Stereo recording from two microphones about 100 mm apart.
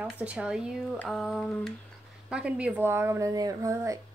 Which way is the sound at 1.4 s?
10° left (ahead or behind).